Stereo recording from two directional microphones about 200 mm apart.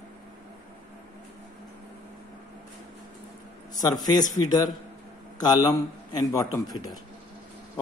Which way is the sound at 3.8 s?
20° left (ahead or behind).